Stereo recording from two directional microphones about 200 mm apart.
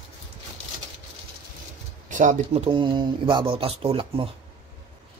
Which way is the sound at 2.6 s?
25° right (ahead or behind).